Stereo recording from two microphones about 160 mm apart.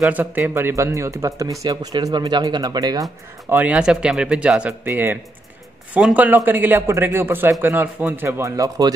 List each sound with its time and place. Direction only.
0.0 s speech: 10° right (ahead or behind)
3.4 s speech: 10° right (ahead or behind)